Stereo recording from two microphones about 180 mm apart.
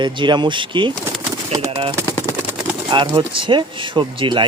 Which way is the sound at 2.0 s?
15° left (ahead or behind).